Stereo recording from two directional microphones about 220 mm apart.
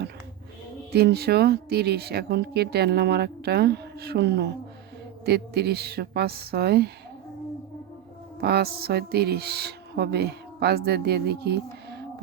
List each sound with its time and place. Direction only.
0.9 s a woman's voice: 45° right (ahead or behind)
8.4 s a woman's voice: 45° right (ahead or behind)